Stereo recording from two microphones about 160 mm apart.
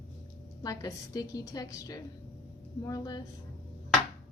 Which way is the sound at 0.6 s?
20° left (ahead or behind).